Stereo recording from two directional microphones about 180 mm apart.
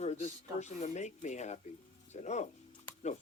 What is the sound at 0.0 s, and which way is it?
Speech, 35° left (ahead or behind).